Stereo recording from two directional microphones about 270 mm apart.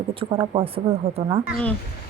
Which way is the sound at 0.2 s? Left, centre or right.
Centre.